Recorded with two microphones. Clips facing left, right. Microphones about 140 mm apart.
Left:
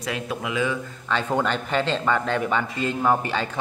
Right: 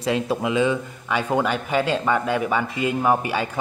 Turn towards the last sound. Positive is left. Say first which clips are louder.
# right 2 dB
turn(degrees=-10)  # may be behind; listen again after turning